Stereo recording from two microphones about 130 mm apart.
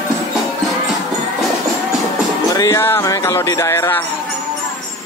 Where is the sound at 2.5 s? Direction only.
25° left (ahead or behind).